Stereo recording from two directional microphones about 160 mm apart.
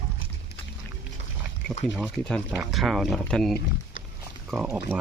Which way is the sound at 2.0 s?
5° left (ahead or behind).